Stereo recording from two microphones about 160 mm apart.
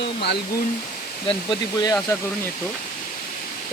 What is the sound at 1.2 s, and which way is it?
Speech, 25° left (ahead or behind).